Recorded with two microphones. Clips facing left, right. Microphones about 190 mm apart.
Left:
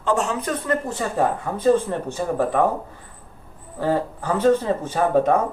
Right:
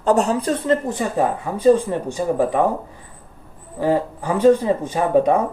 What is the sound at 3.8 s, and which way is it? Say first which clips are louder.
Speech: right 3 dB; 15° right (ahead or behind).